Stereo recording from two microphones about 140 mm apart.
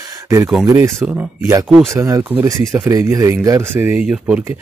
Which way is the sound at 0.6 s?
20° right (ahead or behind).